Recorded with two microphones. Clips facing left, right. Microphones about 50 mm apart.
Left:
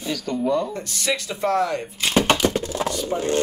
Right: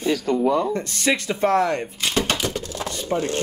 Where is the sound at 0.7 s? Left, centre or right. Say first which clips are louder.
Right 3 dB; right.